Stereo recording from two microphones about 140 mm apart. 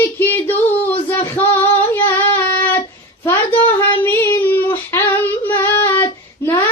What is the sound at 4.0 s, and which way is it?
Female singing, 15° left (ahead or behind).